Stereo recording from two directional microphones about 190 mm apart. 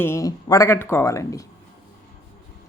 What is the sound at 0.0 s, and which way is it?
A woman's voice, 15° left (ahead or behind).